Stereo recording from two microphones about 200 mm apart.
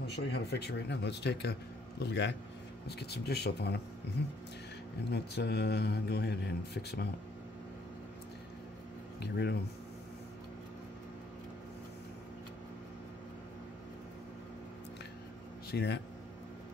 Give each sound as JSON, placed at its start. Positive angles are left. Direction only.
{"t": 0.1, "sound": "a man's voice", "side_deg": 55}
{"t": 5.1, "sound": "a man's voice", "side_deg": 55}
{"t": 9.2, "sound": "a man's voice", "side_deg": 55}
{"t": 15.7, "sound": "a man's voice", "side_deg": 55}